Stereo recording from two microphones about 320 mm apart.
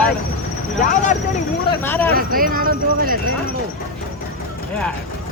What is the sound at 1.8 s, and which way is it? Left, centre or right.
Speech, centre.